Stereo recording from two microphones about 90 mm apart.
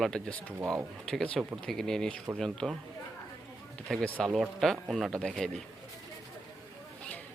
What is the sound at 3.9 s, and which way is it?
Speech, 5° left (ahead or behind).